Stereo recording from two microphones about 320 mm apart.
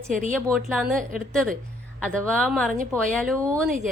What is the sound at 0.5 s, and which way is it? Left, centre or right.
A woman's voice, centre.